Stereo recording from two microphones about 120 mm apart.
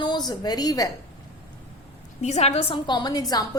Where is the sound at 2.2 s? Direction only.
65° left (ahead or behind); by 3.4 s 35° left (ahead or behind).